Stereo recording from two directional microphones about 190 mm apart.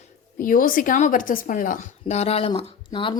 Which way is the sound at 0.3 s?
45° left (ahead or behind).